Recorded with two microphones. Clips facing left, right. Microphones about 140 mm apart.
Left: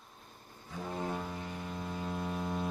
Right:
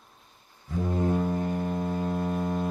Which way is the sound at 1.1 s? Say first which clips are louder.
Right 12 dB; 50° right (ahead or behind).